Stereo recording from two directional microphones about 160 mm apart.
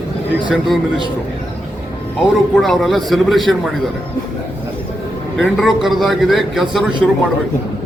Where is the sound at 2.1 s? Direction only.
Centre (ahead or behind).